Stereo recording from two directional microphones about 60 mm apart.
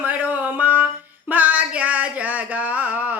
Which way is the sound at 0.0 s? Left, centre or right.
Right.